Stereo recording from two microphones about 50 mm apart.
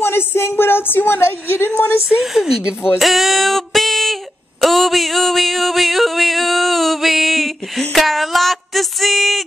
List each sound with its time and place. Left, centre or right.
0.0 s a woman's voice: left
2.3 s speech: centre
3.0 s a sound: centre